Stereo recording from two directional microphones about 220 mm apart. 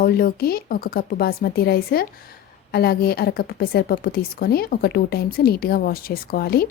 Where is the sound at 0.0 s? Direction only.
45° left (ahead or behind).